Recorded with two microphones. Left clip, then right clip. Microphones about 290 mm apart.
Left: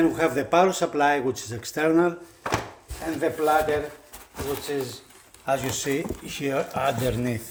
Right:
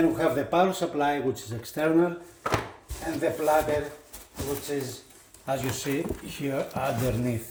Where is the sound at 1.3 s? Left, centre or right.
Left.